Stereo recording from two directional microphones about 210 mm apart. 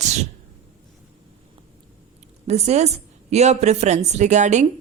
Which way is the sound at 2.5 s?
30° right (ahead or behind).